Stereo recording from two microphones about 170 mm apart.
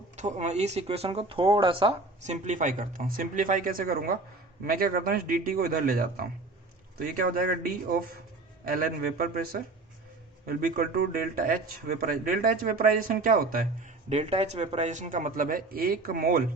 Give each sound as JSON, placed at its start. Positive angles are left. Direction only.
{"t": 0.2, "sound": "speech", "side_deg": -40}
{"t": 8.6, "sound": "speech", "side_deg": -55}
{"t": 14.1, "sound": "a man's voice", "side_deg": -40}